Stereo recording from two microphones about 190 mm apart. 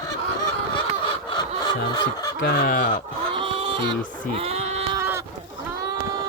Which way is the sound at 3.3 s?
25° right (ahead or behind).